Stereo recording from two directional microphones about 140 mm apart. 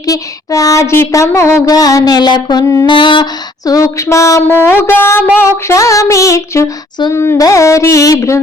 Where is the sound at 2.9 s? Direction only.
35° left (ahead or behind).